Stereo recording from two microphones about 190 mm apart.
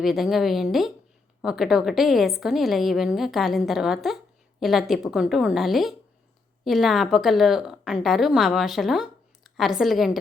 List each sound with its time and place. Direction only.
0.0 s a woman's voice: centre (ahead or behind)